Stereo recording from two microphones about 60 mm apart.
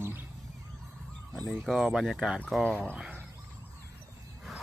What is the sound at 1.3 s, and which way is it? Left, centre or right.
Speech, centre.